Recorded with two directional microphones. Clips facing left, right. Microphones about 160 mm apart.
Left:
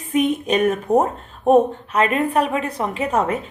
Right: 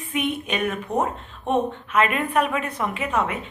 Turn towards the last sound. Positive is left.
turn(degrees=40)  # may be behind; listen again after turning